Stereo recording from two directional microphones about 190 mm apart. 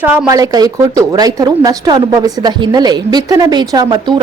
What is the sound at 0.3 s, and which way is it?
Speech, 20° right (ahead or behind).